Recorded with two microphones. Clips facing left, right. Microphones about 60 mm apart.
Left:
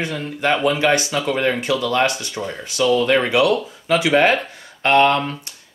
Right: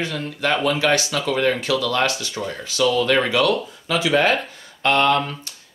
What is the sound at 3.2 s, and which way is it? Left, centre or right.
Speech, centre.